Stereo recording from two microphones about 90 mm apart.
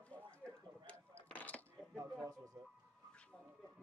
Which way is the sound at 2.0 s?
40° right (ahead or behind).